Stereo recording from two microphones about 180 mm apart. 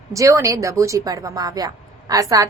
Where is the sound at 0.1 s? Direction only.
15° right (ahead or behind).